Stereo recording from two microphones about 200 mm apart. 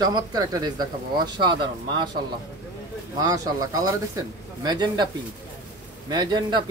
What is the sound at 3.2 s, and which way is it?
Speech, 20° right (ahead or behind).